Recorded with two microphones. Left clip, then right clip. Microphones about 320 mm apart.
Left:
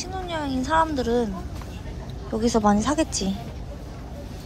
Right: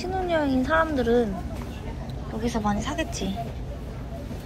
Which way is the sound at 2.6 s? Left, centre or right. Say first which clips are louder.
Left 6 dB; centre.